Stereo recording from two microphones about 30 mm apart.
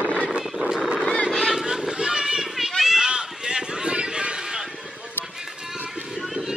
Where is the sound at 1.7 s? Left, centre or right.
Right.